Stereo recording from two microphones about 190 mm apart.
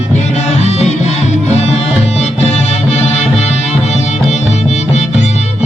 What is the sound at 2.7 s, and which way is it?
Music, 35° left (ahead or behind).